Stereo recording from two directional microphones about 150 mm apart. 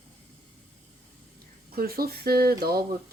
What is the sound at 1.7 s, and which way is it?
Speech, 90° right.